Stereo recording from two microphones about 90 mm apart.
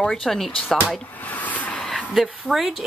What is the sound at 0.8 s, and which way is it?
Speech, 15° left (ahead or behind).